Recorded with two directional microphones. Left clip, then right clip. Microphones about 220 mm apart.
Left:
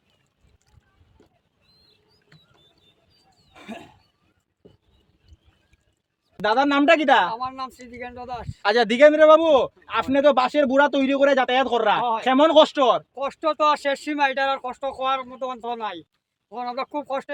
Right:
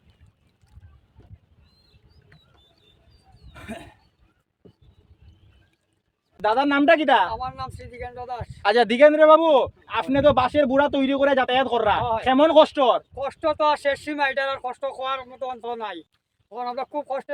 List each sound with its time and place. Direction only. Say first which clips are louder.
3.5 s a sound: right 1 dB; 15° right (ahead or behind)
6.3 s a man's voice: left 1 dB; 5° left (ahead or behind)
7.3 s speech: left 1 dB; 20° left (ahead or behind)
8.6 s a man's voice: even; 5° right (ahead or behind)
13.1 s speech: left 1 dB; 15° left (ahead or behind)